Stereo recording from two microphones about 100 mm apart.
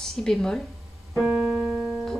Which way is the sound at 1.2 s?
10° right (ahead or behind).